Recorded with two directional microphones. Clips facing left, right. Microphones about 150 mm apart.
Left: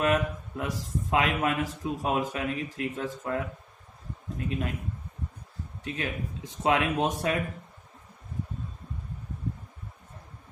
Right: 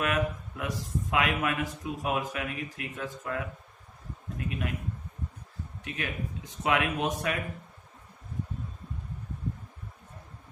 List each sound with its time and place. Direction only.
0.0 s a man's voice: 30° left (ahead or behind)
5.9 s a man's voice: 30° left (ahead or behind)